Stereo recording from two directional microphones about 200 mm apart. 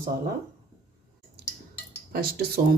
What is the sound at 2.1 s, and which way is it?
Speech, 50° right (ahead or behind).